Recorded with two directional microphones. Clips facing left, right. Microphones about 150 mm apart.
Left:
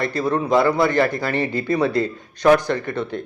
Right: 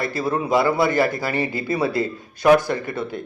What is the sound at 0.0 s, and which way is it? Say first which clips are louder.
Speech: left 2 dB; 5° right (ahead or behind).